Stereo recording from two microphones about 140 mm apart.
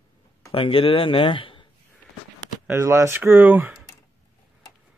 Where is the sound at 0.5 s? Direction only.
40° left (ahead or behind).